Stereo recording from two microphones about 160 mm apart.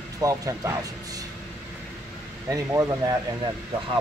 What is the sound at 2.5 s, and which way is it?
Speech, 20° right (ahead or behind).